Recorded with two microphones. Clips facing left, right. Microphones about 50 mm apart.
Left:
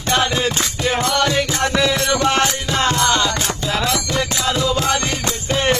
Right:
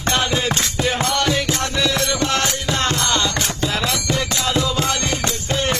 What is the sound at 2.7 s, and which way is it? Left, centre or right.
Music, centre.